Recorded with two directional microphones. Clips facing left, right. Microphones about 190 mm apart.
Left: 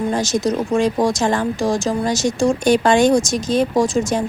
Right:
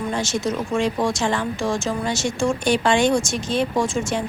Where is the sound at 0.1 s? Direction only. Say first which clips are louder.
Left 5 dB; 40° left (ahead or behind).